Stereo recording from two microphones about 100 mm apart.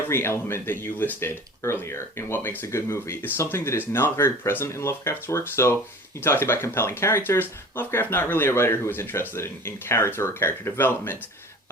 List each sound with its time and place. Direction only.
0.1 s speech: 25° left (ahead or behind)